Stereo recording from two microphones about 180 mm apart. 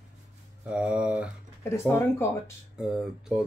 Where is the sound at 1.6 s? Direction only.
15° left (ahead or behind).